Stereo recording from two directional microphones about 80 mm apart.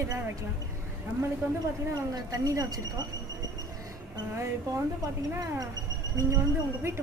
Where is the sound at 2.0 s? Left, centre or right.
Right.